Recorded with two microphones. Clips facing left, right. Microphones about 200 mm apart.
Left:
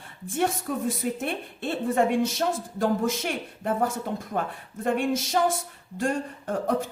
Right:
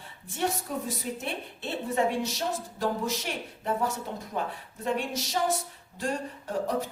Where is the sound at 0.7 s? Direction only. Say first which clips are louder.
Left 5 dB; 50° left (ahead or behind).